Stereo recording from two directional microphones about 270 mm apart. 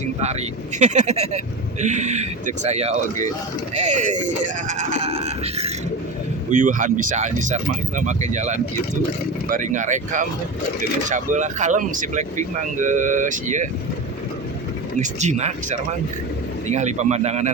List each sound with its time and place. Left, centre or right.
0.2 s speech: right
4.7 s a sound: right
6.5 s speech: right
14.9 s speech: right